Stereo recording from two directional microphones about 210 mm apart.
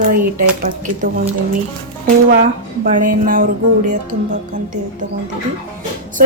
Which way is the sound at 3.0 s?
40° right (ahead or behind).